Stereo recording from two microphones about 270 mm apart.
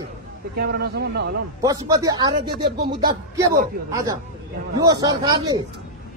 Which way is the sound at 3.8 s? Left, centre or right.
Centre.